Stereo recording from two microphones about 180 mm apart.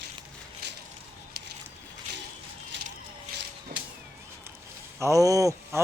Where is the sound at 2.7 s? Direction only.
90° right.